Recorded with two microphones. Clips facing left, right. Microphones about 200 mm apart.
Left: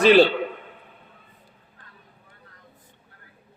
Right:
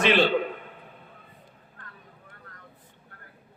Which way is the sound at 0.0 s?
35° left (ahead or behind).